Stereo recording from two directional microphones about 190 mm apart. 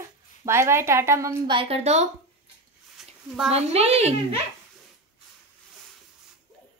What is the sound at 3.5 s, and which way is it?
Speech, 35° right (ahead or behind).